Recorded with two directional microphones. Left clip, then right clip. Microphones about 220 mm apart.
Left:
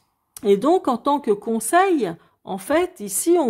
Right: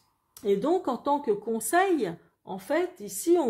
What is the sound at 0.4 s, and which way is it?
Speech, 40° left (ahead or behind).